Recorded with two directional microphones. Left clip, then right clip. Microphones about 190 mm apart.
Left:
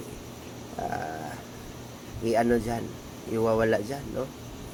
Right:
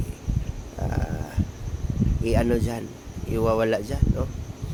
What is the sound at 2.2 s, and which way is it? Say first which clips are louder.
Speech: even; 20° right (ahead or behind).